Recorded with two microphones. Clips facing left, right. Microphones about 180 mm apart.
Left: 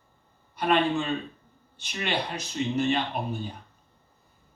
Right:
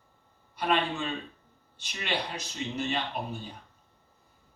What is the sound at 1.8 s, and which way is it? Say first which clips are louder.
Speech: left 7 dB; 55° left (ahead or behind).